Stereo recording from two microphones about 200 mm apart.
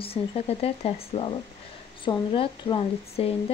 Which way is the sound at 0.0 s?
30° left (ahead or behind).